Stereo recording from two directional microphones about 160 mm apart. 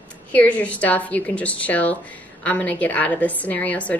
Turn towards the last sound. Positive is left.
turn(degrees=10)  # may be behind; listen again after turning